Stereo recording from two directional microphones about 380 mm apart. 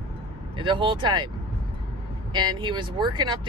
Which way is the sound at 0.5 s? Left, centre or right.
Centre.